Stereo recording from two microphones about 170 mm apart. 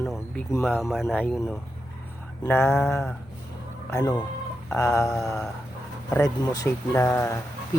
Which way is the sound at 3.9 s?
15° left (ahead or behind).